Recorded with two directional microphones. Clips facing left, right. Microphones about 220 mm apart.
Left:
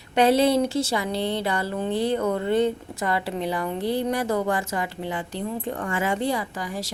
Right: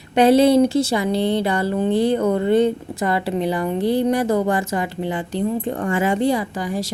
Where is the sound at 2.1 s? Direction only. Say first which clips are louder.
Right 5 dB; 30° right (ahead or behind).